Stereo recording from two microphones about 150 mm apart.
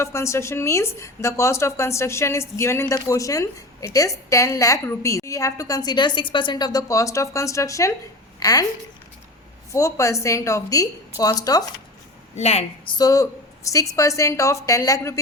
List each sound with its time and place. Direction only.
0.0 s a woman's voice: 20° left (ahead or behind)
9.7 s a woman's voice: 20° left (ahead or behind)
12.4 s a woman's voice: 45° left (ahead or behind)
12.9 s a woman's voice: 25° left (ahead or behind)